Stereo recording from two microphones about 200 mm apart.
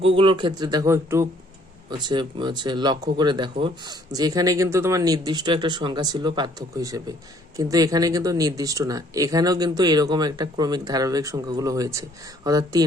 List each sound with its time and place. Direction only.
0.0 s a man's voice: 25° right (ahead or behind)